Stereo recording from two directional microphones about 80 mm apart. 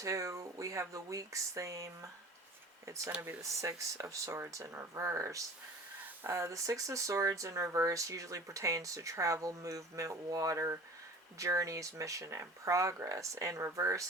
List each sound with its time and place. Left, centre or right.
0.0 s speech: right